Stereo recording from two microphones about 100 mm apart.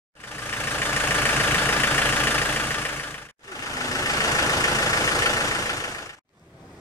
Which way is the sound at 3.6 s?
35° left (ahead or behind).